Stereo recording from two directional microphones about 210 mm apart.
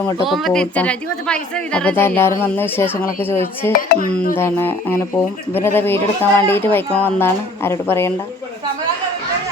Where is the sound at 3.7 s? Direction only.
45° left (ahead or behind).